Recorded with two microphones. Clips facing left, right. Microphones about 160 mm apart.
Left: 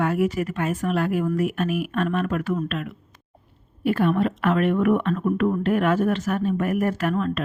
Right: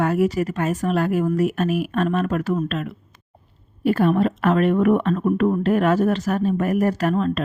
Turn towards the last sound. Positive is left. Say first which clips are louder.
# right 3 dB
turn(degrees=-30)  # may be behind; listen again after turning